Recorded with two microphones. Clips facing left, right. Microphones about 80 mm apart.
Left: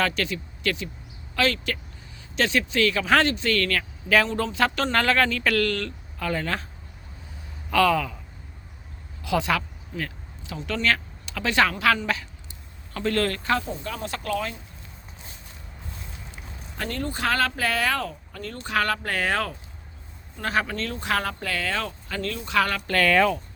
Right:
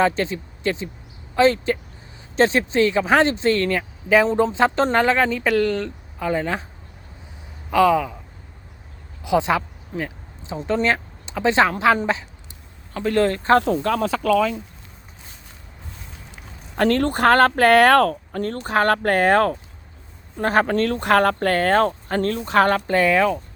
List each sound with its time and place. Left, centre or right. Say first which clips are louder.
0.0 s speech: right 6 dB; right
7.7 s speech: right 4 dB; centre
9.2 s speech: right 5 dB; right
10.0 s a sound: right 4 dB; right
10.6 s speech: right 8 dB; right
10.8 s speech: right 3 dB; right
12.9 s speech: right 5 dB; centre
13.6 s speech: right 12 dB; right
16.7 s speech: right 12 dB; right
22.9 s speech: right 4 dB; right
23.1 s speech: right 2 dB; centre